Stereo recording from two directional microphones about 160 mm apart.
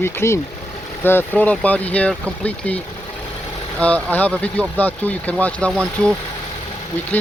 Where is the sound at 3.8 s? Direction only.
10° left (ahead or behind).